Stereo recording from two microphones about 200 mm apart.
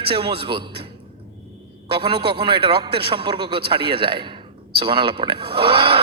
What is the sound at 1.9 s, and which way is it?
A man's voice, 25° right (ahead or behind).